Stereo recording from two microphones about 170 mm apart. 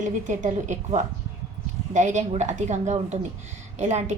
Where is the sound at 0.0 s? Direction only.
45° right (ahead or behind).